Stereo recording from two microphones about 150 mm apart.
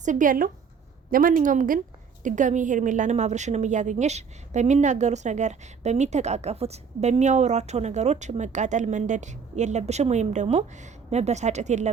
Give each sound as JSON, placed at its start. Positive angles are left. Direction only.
{"t": 0.0, "sound": "a woman's voice", "side_deg": -60}